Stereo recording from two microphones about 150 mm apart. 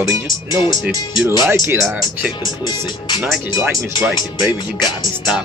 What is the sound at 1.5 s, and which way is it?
Speech, 15° right (ahead or behind).